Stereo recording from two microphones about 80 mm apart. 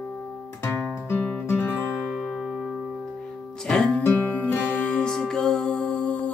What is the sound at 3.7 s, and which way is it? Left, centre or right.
Music, centre.